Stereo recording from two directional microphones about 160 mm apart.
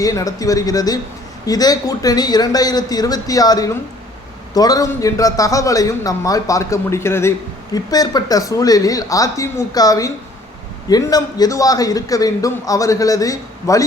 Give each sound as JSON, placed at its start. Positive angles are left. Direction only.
{"t": 0.0, "sound": "a man's voice", "side_deg": 20}